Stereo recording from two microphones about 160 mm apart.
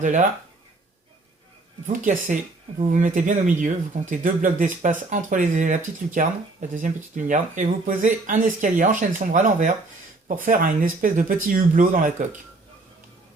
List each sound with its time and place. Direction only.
0.0 s speech: 50° right (ahead or behind)
1.9 s speech: 55° right (ahead or behind)